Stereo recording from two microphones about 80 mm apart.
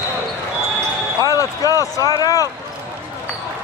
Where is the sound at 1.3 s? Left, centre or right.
Left.